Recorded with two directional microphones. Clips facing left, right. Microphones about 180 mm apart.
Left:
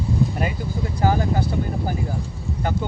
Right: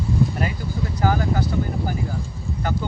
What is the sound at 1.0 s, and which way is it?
Speech, 25° left (ahead or behind).